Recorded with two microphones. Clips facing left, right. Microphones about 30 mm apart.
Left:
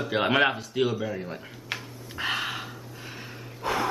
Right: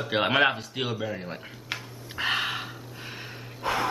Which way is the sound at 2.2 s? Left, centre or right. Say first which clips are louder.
Right 2 dB; centre.